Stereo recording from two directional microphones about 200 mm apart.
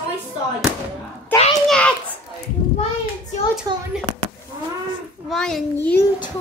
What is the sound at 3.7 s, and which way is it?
Speech, 20° right (ahead or behind).